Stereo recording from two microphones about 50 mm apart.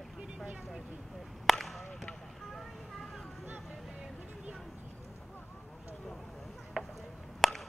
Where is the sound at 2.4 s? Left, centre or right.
Centre.